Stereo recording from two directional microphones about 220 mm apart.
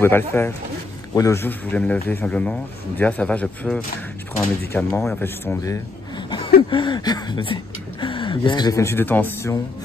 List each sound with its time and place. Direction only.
0.0 s speech: 10° left (ahead or behind)